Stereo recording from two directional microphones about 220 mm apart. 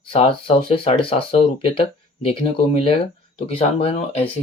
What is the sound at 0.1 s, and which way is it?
Speech, 25° left (ahead or behind).